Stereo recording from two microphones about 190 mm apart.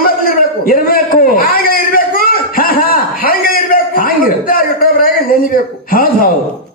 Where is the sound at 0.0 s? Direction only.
50° left (ahead or behind).